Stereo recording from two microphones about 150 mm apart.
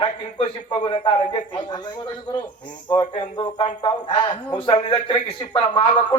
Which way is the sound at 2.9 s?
30° left (ahead or behind).